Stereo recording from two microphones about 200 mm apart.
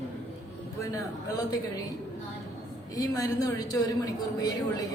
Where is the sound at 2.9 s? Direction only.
15° left (ahead or behind).